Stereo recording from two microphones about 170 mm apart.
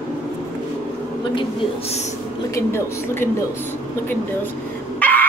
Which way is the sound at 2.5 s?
15° left (ahead or behind).